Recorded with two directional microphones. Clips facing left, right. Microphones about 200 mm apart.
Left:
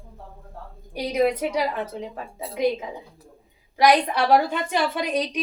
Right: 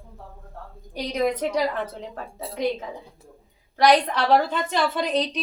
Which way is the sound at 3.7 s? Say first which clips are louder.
Even; 10° left (ahead or behind).